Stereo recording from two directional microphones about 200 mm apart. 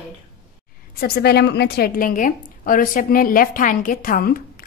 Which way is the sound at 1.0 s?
50° left (ahead or behind).